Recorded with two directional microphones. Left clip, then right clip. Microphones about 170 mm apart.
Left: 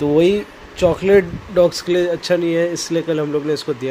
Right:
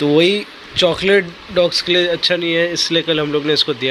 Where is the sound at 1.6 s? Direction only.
15° left (ahead or behind).